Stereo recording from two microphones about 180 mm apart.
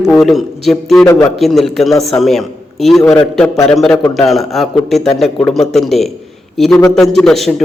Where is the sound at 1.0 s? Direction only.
15° left (ahead or behind).